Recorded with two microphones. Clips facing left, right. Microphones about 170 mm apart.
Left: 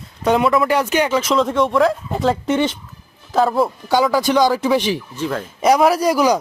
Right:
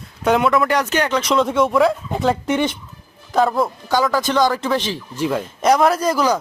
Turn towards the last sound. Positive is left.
turn(degrees=10)  # may be behind; listen again after turning